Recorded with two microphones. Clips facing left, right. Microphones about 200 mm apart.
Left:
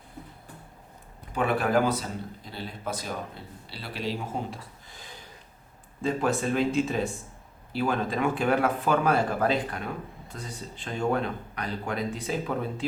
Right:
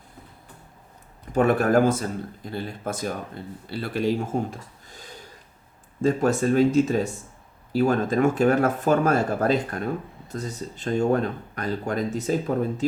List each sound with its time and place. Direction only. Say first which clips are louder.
1.3 s speech: right 6 dB; 45° right (ahead or behind)